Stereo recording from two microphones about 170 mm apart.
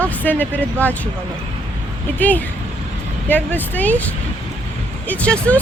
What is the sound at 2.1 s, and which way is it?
Speech, 10° left (ahead or behind).